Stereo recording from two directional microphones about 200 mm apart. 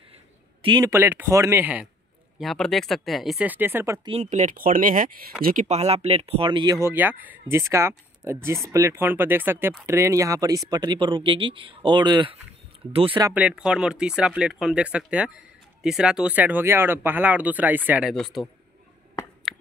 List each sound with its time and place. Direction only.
0.6 s speech: 25° right (ahead or behind)
4.1 s speech: 35° right (ahead or behind)
13.3 s speech: 5° right (ahead or behind)
19.5 s finger snapping: centre (ahead or behind)